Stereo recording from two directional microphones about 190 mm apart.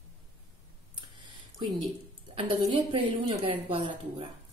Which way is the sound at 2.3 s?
30° right (ahead or behind).